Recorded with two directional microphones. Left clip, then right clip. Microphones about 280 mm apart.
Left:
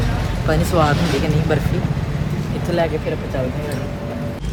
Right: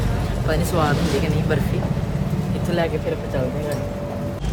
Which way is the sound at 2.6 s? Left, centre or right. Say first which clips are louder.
Left 3 dB; centre.